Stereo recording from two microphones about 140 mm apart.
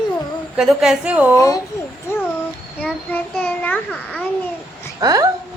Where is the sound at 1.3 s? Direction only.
25° left (ahead or behind).